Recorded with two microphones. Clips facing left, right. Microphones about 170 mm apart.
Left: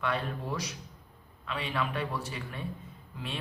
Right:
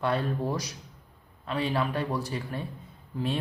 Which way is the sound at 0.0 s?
35° right (ahead or behind).